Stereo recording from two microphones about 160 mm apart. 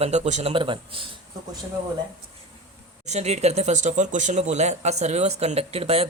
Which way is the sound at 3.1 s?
45° right (ahead or behind).